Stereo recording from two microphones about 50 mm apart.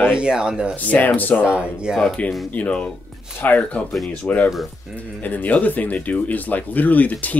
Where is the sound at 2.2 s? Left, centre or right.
Left.